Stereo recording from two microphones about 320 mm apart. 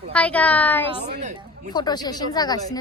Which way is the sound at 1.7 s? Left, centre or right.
Centre.